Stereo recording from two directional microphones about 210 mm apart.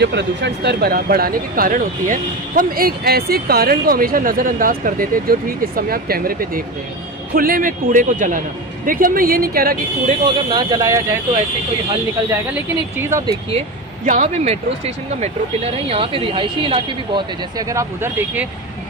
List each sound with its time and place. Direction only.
0.0 s a man's voice: 55° right (ahead or behind)
10.2 s speech: 20° right (ahead or behind)
13.0 s speech: 15° right (ahead or behind)
14.0 s speech: 35° right (ahead or behind); by 18.4 s 10° right (ahead or behind)